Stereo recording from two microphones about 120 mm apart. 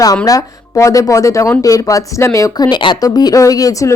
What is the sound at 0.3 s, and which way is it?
Speech, 25° left (ahead or behind).